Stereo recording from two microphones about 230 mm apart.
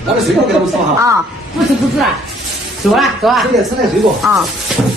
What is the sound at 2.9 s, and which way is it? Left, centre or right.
Speech, centre.